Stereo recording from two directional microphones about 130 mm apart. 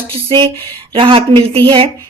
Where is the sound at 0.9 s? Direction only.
45° right (ahead or behind).